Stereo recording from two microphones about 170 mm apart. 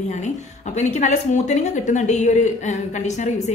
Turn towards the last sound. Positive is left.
turn(degrees=45)  # may be behind; listen again after turning